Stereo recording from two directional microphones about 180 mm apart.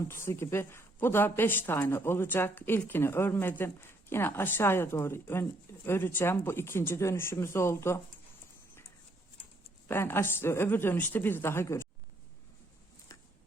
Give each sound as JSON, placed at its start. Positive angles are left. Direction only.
{"t": 0.1, "sound": "a woman's voice", "side_deg": 15}
{"t": 9.9, "sound": "a woman's voice", "side_deg": 10}
{"t": 13.1, "sound": "a sound", "side_deg": 20}